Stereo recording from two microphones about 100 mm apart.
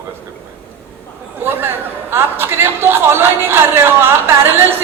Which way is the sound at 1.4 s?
20° right (ahead or behind).